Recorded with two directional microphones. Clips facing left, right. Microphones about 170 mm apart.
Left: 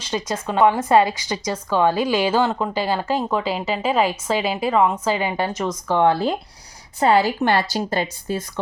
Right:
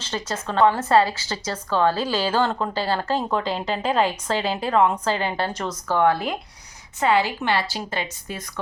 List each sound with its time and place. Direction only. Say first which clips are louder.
0.0 s speech: left 4 dB; 10° left (ahead or behind)
6.0 s speech: left 2 dB; 30° left (ahead or behind)
7.0 s a woman's voice: left 4 dB; 40° left (ahead or behind)